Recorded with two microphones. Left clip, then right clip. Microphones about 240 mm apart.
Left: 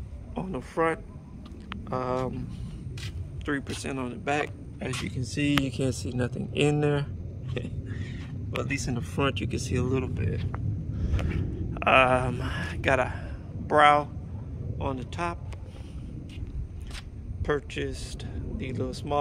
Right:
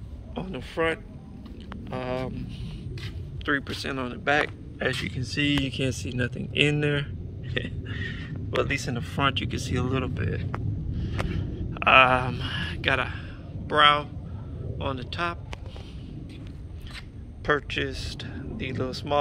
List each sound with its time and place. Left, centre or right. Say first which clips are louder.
0.3 s speech: even; centre
7.9 s a sound: right 6 dB; centre
8.6 s speech: right 3 dB; centre
17.5 s speech: right 4 dB; centre